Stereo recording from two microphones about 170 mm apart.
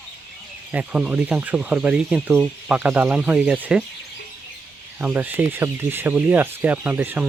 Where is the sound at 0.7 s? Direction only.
5° right (ahead or behind).